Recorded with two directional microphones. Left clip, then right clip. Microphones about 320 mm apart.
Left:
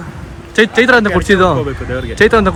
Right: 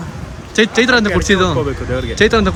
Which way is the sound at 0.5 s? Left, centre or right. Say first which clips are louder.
Left 3 dB; centre.